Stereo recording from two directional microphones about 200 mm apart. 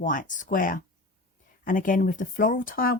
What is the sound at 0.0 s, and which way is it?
Speech, 40° left (ahead or behind).